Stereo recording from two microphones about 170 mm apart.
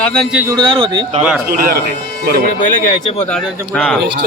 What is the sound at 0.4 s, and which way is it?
Speech, 25° right (ahead or behind).